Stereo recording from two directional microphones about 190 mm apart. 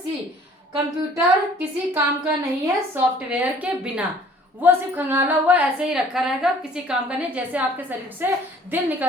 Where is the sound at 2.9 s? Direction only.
10° right (ahead or behind).